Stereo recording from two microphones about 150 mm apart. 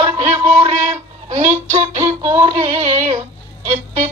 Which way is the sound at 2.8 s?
50° right (ahead or behind).